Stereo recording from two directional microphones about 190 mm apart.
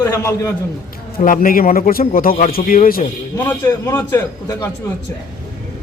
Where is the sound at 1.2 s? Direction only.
45° left (ahead or behind).